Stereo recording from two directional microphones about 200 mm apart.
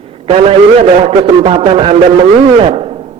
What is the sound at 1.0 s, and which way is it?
A man's voice, 30° right (ahead or behind).